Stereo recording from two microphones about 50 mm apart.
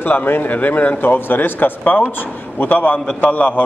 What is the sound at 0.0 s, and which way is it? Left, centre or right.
A man's voice, left.